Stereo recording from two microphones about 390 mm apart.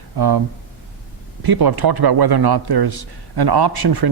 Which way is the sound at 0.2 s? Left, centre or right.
Right.